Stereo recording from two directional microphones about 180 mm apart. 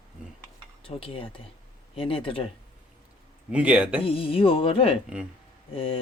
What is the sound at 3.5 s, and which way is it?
Speech, 5° right (ahead or behind).